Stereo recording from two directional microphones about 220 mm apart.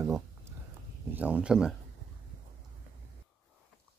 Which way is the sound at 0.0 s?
10° right (ahead or behind).